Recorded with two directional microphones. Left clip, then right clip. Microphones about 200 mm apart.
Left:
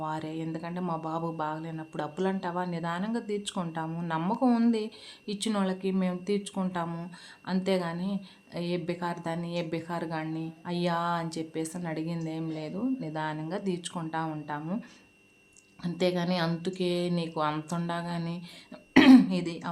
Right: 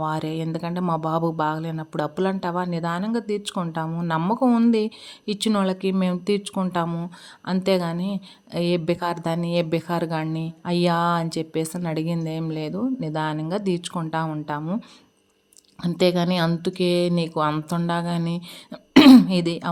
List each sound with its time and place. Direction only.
0.0 s speech: 35° right (ahead or behind)
18.7 s throat clearing: 35° right (ahead or behind)